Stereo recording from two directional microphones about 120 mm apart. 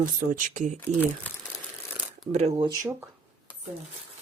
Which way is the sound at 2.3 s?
70° right (ahead or behind).